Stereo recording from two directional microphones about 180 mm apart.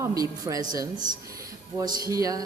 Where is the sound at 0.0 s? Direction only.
20° right (ahead or behind).